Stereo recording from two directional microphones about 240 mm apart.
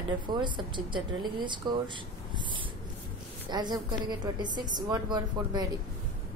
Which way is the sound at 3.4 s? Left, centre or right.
Centre.